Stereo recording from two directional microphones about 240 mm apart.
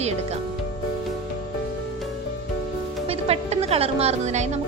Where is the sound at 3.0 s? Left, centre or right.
Right.